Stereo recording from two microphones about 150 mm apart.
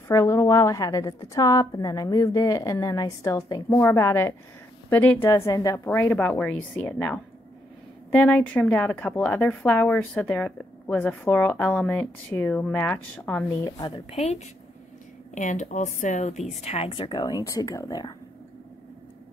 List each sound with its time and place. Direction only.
0.1 s a woman's voice: 20° left (ahead or behind)
5.3 s a woman's voice: 25° left (ahead or behind)
5.9 s a woman's voice: 10° left (ahead or behind)
13.7 s a woman's voice: 35° left (ahead or behind)